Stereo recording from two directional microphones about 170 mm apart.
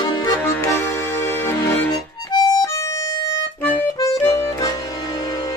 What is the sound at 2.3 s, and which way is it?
Music, 25° left (ahead or behind).